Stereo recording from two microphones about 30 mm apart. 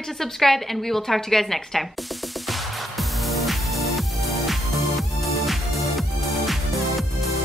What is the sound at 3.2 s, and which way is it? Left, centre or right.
Music, centre.